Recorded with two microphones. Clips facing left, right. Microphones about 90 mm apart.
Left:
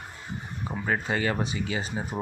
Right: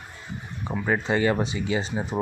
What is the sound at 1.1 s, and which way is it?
Speech, 25° right (ahead or behind).